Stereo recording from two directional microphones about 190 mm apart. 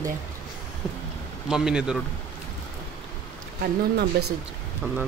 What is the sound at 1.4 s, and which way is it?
Speech, 5° right (ahead or behind).